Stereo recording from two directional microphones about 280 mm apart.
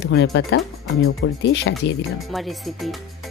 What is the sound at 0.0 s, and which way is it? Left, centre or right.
Speech, left.